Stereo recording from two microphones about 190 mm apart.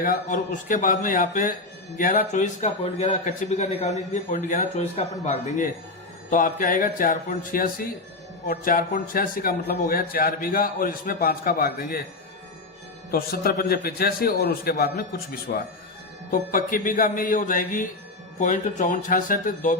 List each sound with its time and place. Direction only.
0.0 s a man's voice: 45° left (ahead or behind)
6.3 s a man's voice: 45° left (ahead or behind)
13.1 s a man's voice: 50° left (ahead or behind)